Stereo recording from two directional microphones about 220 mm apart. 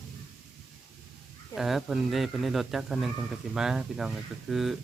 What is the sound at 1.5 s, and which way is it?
Speech, centre (ahead or behind).